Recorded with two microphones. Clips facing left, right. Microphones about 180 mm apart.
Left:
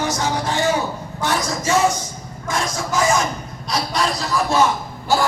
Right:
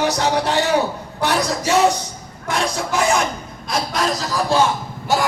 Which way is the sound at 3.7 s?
50° right (ahead or behind).